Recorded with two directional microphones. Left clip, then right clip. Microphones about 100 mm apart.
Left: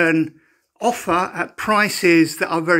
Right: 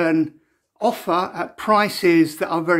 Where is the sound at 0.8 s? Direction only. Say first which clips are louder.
Left 1 dB; 15° left (ahead or behind).